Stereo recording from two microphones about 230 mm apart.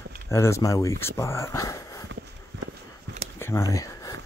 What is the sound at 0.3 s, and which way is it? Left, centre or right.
Speech, centre.